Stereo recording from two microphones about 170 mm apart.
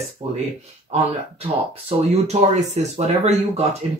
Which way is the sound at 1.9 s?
40° right (ahead or behind).